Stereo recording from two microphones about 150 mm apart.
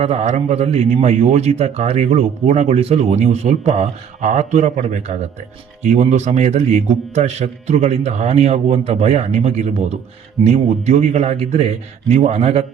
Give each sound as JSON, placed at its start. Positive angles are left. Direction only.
{"t": 0.0, "sound": "a man's voice", "side_deg": -45}